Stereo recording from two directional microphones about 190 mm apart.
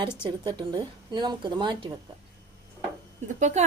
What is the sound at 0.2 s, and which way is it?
Speech, 25° right (ahead or behind).